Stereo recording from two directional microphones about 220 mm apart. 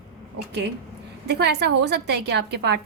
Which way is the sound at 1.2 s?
50° right (ahead or behind).